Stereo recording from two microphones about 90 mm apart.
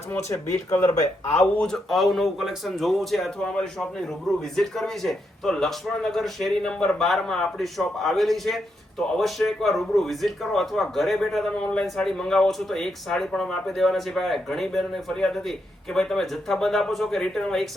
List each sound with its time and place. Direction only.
0.3 s speech: 35° left (ahead or behind)
1.5 s speech: 5° left (ahead or behind)